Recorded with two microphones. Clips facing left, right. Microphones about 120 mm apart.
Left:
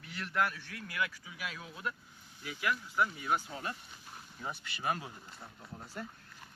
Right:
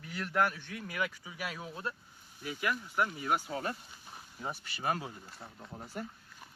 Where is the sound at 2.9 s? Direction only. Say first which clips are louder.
Right 1 dB; 50° right (ahead or behind).